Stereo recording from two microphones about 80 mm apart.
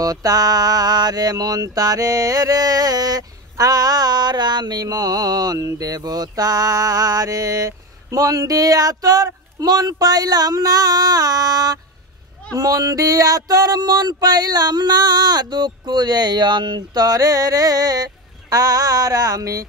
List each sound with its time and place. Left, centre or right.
0.0 s mantra: right
5.6 s mantra: right
12.5 s a sound: right